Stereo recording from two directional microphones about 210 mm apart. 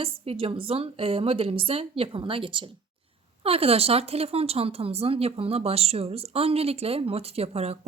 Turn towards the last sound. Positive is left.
turn(degrees=-30)  # may be behind; listen again after turning